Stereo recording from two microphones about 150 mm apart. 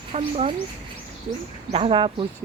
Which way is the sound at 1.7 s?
35° right (ahead or behind).